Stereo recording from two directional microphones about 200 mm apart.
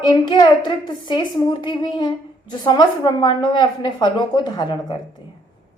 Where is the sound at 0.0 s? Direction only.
20° left (ahead or behind).